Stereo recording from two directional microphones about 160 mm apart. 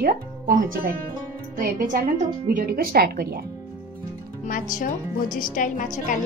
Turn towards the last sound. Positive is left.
turn(degrees=55)  # may be behind; listen again after turning